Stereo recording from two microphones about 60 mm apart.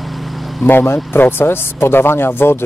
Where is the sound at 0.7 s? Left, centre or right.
Left.